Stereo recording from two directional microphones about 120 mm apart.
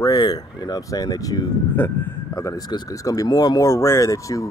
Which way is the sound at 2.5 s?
30° left (ahead or behind).